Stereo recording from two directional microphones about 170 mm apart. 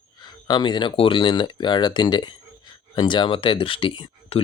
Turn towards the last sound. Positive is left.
turn(degrees=30)  # may be behind; listen again after turning